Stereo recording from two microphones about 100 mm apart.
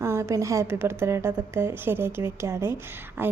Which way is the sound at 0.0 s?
30° right (ahead or behind).